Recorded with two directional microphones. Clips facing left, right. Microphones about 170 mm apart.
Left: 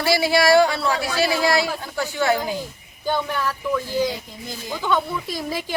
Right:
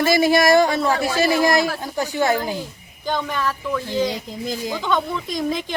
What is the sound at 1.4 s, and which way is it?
Speech, 15° right (ahead or behind).